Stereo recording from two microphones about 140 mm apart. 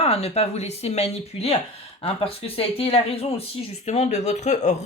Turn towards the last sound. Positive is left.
turn(degrees=55)  # may be behind; listen again after turning